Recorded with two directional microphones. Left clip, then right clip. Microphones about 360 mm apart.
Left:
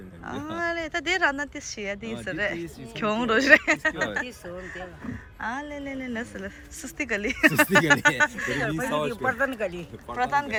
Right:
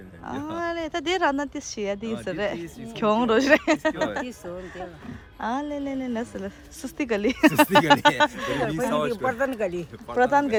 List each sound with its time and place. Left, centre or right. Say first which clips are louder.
0.3 s a woman's voice: even; centre
5.4 s a woman's voice: right 4 dB; centre